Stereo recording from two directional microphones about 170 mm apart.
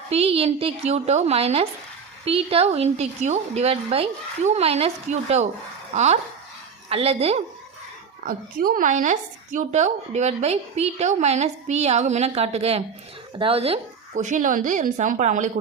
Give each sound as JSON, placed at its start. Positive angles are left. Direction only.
{"t": 0.1, "sound": "a woman's voice", "side_deg": -35}
{"t": 8.2, "sound": "a woman's voice", "side_deg": -55}